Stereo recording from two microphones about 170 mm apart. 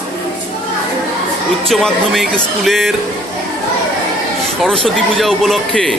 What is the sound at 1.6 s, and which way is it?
Speech, centre (ahead or behind).